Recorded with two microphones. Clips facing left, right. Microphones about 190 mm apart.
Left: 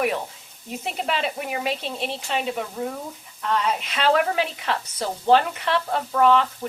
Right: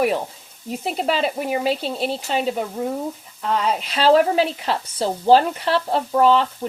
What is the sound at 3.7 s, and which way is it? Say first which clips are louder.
Speech: right 7 dB; 35° right (ahead or behind).